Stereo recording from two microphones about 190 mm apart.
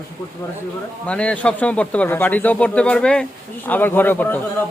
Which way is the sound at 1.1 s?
5° left (ahead or behind).